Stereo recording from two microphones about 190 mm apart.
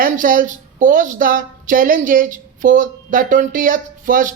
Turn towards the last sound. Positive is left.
turn(degrees=-45)  # may be behind; listen again after turning